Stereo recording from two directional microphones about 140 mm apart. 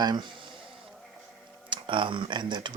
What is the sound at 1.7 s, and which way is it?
Speech, 35° right (ahead or behind).